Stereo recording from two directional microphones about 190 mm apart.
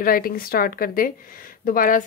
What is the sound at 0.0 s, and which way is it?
Speech, 50° left (ahead or behind).